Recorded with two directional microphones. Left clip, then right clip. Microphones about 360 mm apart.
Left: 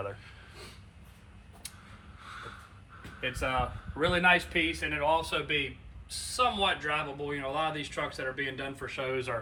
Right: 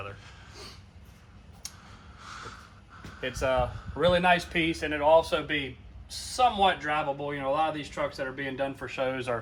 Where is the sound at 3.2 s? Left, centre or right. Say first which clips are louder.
Right 4 dB; right.